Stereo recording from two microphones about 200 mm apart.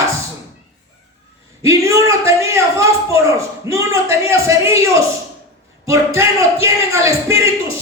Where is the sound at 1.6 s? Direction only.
15° right (ahead or behind).